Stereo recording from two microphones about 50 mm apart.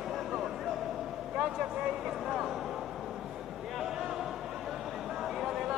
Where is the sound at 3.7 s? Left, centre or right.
Centre.